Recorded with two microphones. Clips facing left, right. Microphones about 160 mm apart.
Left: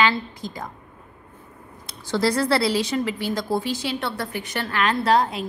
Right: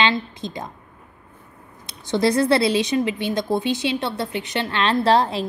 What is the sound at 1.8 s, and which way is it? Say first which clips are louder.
Speech: right 2 dB; 20° right (ahead or behind).